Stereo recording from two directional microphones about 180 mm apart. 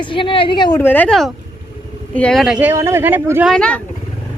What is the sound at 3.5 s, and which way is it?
Speech, 5° left (ahead or behind).